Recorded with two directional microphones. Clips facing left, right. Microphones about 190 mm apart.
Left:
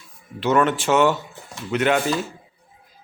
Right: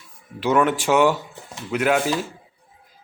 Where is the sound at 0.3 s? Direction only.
10° right (ahead or behind).